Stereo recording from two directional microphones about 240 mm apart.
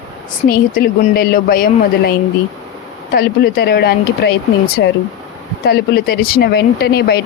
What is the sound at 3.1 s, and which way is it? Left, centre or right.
Speech, left.